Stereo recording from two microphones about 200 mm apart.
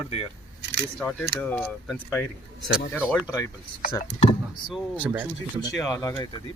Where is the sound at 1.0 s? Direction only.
5° left (ahead or behind).